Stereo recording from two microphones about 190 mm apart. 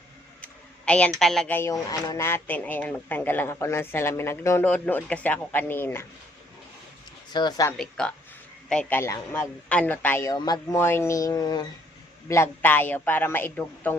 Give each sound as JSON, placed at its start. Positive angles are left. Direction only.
{"t": 0.4, "sound": "a sound", "side_deg": 5}
{"t": 1.2, "sound": "speech", "side_deg": 0}
{"t": 7.3, "sound": "speech", "side_deg": 20}
{"t": 7.8, "sound": "speech", "side_deg": 5}